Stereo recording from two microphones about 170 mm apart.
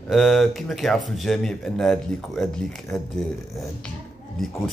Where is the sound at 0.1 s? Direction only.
Centre (ahead or behind).